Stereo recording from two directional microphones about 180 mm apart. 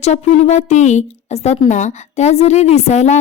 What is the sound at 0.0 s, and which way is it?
Speech, 40° left (ahead or behind).